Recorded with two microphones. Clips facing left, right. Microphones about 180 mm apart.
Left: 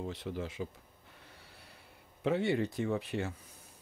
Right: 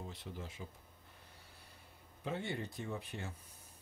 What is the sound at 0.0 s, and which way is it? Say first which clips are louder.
Speech: left 9 dB; 80° left.